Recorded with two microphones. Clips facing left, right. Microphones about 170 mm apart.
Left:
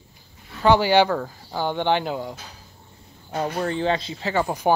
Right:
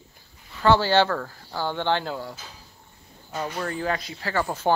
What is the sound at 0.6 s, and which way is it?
Speech, 15° left (ahead or behind).